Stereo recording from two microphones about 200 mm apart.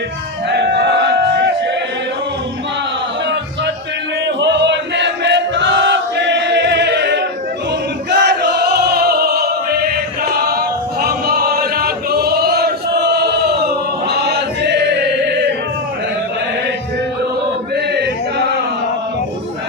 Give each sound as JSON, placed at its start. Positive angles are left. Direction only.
{"t": 0.5, "sound": "crowd", "side_deg": -55}
{"t": 4.4, "sound": "chant", "side_deg": -60}
{"t": 8.1, "sound": "music", "side_deg": -55}